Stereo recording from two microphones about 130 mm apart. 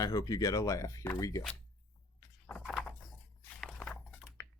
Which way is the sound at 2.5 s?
10° left (ahead or behind).